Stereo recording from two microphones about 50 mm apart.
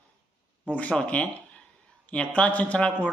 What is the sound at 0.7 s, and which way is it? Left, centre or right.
Speech, left.